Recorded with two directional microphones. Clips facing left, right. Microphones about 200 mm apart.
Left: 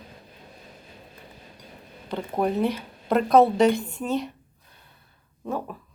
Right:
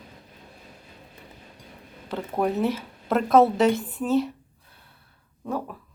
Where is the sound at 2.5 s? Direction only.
5° right (ahead or behind).